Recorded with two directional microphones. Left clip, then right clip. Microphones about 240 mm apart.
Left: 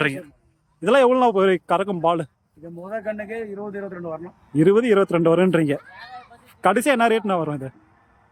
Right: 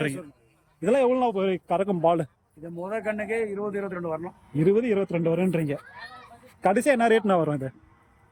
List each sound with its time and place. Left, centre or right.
0.8 s a man's voice: centre
4.5 s a man's voice: centre